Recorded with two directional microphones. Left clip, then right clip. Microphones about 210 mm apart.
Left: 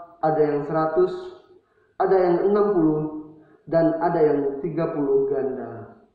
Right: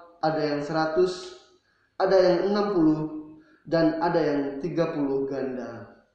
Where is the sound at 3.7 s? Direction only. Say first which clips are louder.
Left 3 dB; 40° right (ahead or behind).